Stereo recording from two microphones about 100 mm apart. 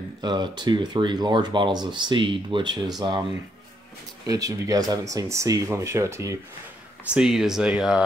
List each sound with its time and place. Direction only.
0.2 s speech: 45° right (ahead or behind)
4.3 s speech: 35° right (ahead or behind)
7.2 s speech: 5° right (ahead or behind)